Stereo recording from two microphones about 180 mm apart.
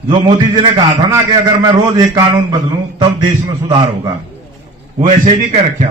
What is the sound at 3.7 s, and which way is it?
Speech, 20° right (ahead or behind).